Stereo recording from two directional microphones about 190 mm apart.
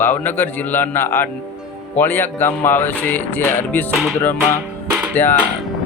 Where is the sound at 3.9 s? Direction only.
Centre (ahead or behind).